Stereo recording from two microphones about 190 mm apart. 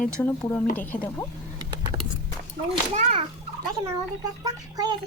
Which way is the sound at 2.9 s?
30° right (ahead or behind).